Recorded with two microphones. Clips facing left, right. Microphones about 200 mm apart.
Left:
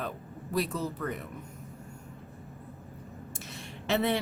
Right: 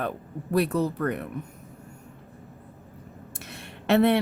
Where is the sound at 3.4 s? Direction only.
60° right (ahead or behind).